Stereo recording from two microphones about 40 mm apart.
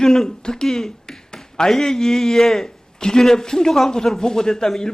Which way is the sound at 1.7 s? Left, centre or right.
Centre.